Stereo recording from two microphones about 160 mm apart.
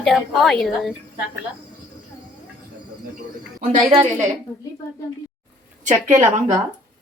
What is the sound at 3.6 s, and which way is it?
Speech, 40° right (ahead or behind).